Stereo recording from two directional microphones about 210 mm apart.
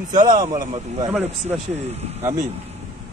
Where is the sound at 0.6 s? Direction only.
30° right (ahead or behind).